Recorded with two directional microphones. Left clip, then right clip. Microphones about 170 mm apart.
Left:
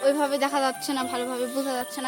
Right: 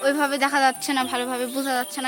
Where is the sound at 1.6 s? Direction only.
35° right (ahead or behind).